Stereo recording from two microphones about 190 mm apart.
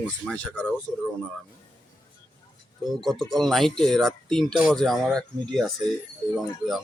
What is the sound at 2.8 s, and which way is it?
Speech, centre (ahead or behind).